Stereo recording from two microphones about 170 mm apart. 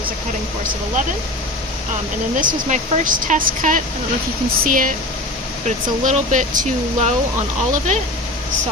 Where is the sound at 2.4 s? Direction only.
50° right (ahead or behind).